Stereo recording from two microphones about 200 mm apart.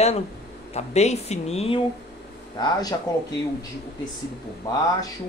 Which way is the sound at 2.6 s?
20° left (ahead or behind).